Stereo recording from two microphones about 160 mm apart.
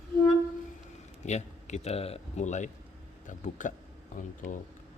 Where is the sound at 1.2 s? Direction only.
45° left (ahead or behind).